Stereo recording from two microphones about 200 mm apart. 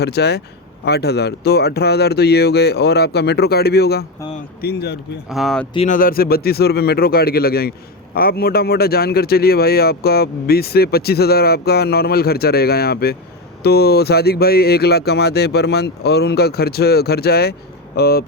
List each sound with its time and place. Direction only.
0.0 s a man's voice: 55° left (ahead or behind)
5.3 s speech: centre (ahead or behind)
5.7 s speech: 30° left (ahead or behind)
6.0 s a man's voice: 45° left (ahead or behind)